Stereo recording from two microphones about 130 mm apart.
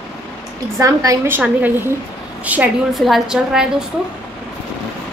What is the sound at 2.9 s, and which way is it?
Speech, centre (ahead or behind).